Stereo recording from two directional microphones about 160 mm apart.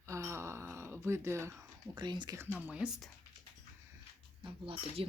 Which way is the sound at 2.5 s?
10° right (ahead or behind).